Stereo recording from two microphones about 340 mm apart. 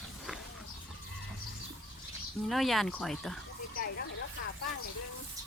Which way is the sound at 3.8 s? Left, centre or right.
Left.